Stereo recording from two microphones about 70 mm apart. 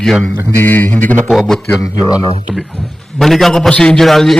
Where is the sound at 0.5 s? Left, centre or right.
Left.